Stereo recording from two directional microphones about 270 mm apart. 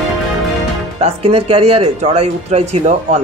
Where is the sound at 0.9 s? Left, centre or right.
Right.